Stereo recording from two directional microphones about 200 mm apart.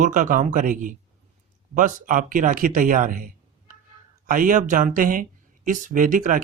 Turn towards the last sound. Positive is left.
turn(degrees=-40)  # may be behind; listen again after turning